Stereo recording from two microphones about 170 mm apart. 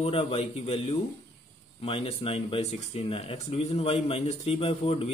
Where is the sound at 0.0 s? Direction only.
35° left (ahead or behind).